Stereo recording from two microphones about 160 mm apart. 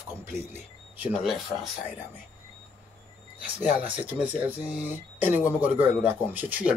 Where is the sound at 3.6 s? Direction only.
10° right (ahead or behind).